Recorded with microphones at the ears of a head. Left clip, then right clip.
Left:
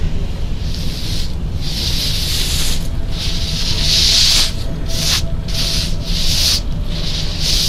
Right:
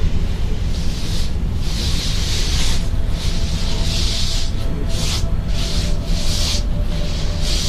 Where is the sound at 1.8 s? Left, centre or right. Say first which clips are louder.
Left 5 dB; left.